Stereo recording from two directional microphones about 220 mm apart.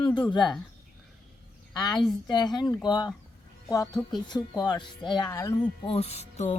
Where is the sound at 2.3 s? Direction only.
20° left (ahead or behind).